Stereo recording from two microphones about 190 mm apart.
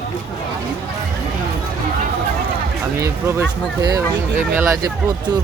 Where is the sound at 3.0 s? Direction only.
15° right (ahead or behind).